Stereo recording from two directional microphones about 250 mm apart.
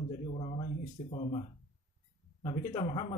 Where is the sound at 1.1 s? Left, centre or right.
Left.